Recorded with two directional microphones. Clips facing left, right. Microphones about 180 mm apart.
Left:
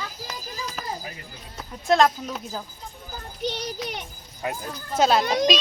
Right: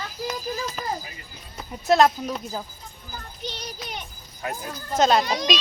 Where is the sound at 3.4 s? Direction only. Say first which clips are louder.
Left 7 dB; 70° left (ahead or behind).